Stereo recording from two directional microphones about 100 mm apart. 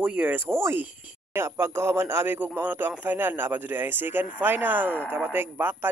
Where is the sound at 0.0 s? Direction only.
15° right (ahead or behind).